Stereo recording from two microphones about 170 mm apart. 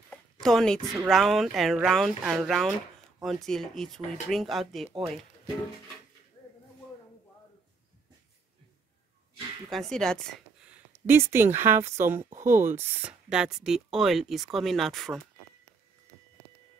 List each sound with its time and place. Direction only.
0.1 s a sound: centre (ahead or behind)
1.1 s speech: centre (ahead or behind)
9.7 s speech: centre (ahead or behind)
10.7 s speech: 15° right (ahead or behind)
12.2 s speech: 45° right (ahead or behind)
12.4 s speech: 15° right (ahead or behind)